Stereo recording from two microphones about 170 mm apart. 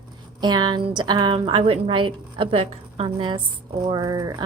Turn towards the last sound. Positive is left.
turn(degrees=-20)  # may be behind; listen again after turning